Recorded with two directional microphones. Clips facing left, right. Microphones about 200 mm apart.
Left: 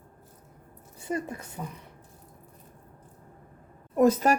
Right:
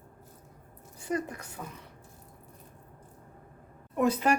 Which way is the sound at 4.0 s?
40° left (ahead or behind).